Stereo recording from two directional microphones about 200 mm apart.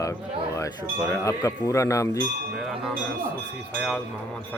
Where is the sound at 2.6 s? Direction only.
Centre (ahead or behind).